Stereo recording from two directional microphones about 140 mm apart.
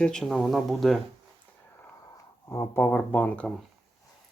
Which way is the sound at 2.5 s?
20° left (ahead or behind).